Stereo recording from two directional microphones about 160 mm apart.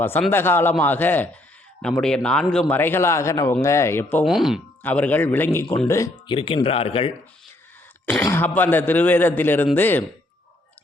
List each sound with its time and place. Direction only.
0.3 s speech: 15° left (ahead or behind)
4.2 s speech: centre (ahead or behind)
4.8 s speech: 10° left (ahead or behind)
6.2 s speech: 35° left (ahead or behind)
8.2 s speech: 15° left (ahead or behind)